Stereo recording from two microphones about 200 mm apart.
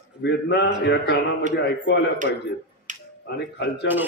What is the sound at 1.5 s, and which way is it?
Speech, 60° left (ahead or behind).